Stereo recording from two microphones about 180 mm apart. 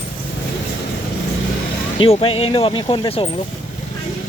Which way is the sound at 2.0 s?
30° left (ahead or behind).